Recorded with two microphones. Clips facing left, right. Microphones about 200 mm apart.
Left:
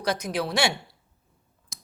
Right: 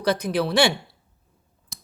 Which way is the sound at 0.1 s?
60° right (ahead or behind).